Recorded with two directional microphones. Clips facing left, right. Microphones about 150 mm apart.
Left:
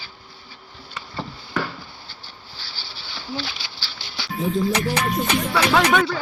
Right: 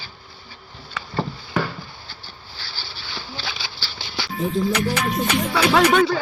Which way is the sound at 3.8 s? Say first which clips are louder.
Right 6 dB; 45° right (ahead or behind).